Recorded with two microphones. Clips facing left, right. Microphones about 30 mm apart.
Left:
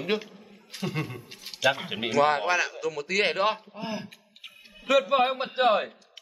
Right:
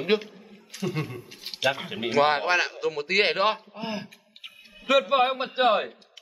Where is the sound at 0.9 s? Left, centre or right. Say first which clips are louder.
Right 1 dB; centre.